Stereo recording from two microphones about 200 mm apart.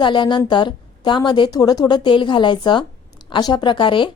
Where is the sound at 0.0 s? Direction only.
25° left (ahead or behind).